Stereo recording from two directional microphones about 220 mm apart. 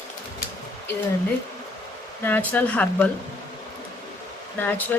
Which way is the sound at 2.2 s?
10° left (ahead or behind).